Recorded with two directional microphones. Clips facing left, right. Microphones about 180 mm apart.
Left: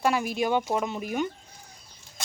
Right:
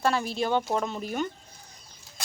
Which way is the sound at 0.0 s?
15° left (ahead or behind).